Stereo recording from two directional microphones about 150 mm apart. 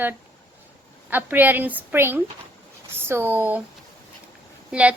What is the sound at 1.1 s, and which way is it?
A woman's voice, 15° right (ahead or behind).